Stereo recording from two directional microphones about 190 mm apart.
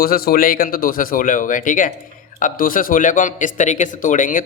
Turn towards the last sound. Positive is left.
turn(degrees=45)  # may be behind; listen again after turning